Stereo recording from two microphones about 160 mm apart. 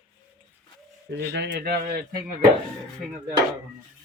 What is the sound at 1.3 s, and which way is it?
Speech, 90° right.